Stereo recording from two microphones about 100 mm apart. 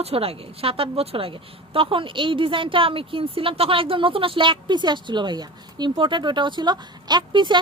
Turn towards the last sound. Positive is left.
turn(degrees=-50)  # may be behind; listen again after turning